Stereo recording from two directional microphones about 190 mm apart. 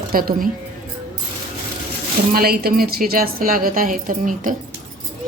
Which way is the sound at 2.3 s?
50° right (ahead or behind).